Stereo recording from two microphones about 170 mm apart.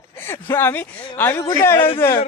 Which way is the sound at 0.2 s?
15° left (ahead or behind).